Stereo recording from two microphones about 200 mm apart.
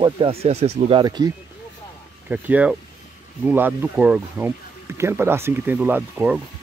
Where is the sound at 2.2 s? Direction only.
5° right (ahead or behind).